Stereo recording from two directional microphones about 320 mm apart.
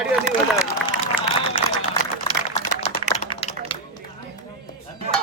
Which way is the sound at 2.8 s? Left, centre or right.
Left.